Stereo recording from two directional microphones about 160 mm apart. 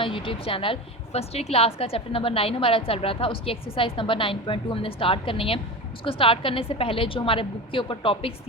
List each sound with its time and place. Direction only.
0.0 s a woman's voice: 35° left (ahead or behind)